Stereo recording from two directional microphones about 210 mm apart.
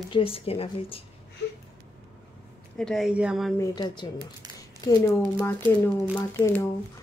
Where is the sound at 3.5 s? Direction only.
20° left (ahead or behind).